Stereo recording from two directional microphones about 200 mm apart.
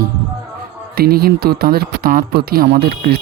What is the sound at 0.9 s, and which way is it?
Speech, 50° right (ahead or behind).